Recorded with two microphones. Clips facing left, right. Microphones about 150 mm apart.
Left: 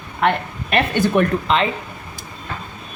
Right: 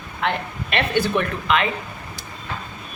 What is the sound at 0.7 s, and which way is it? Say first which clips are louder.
Speech: left 4 dB; 45° left (ahead or behind).